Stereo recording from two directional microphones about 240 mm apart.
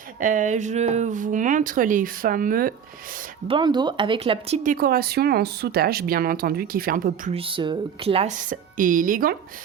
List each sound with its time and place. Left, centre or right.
0.2 s speech: right
3.4 s speech: centre; by 7.3 s right
7.3 s speech: right